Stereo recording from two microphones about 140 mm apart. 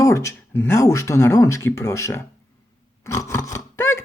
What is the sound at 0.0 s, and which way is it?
Speech, 20° left (ahead or behind).